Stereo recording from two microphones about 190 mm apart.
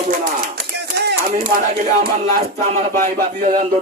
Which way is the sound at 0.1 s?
55° right (ahead or behind).